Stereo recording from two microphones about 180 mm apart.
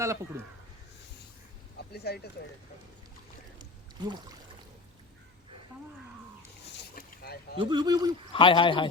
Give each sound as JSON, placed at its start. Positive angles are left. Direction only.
{"t": 0.0, "sound": "speech", "side_deg": -15}
{"t": 1.9, "sound": "speech", "side_deg": 65}
{"t": 3.6, "sound": "a sound", "side_deg": -25}
{"t": 6.9, "sound": "boat", "side_deg": 55}
{"t": 7.6, "sound": "speech", "side_deg": -25}
{"t": 8.3, "sound": "speech", "side_deg": 30}